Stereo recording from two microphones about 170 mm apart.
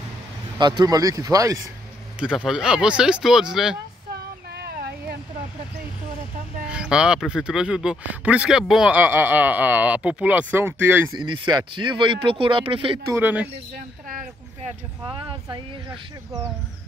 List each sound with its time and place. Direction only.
0.6 s speech: 25° right (ahead or behind)
2.1 s speech: 5° right (ahead or behind)
4.2 s a sound: 70° right (ahead or behind)
6.7 s speech: 5° right (ahead or behind)
11.1 s speech: 25° right (ahead or behind)
13.1 s speech: 10° right (ahead or behind)
15.0 s speech: 30° right (ahead or behind)